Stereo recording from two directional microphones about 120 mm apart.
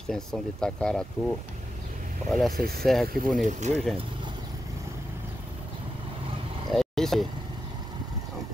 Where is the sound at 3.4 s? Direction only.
90° right.